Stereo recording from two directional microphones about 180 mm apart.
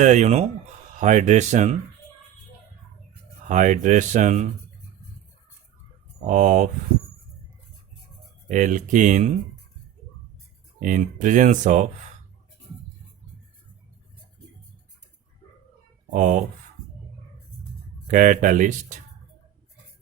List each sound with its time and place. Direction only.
0.0 s speech: 40° right (ahead or behind)
3.4 s speech: 45° right (ahead or behind)
6.2 s speech: 45° right (ahead or behind)
8.4 s speech: 45° right (ahead or behind)
10.8 s speech: 45° right (ahead or behind)
16.0 s speech: 40° right (ahead or behind)
18.1 s speech: 45° right (ahead or behind)